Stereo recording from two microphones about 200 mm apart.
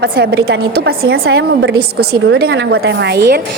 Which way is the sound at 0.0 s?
55° right (ahead or behind).